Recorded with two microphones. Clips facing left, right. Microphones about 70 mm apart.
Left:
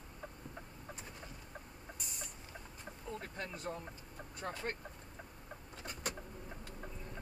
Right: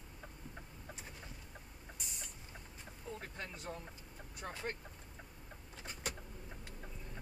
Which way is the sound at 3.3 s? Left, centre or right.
Left.